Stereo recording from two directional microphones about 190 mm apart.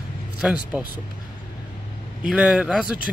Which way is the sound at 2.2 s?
5° right (ahead or behind).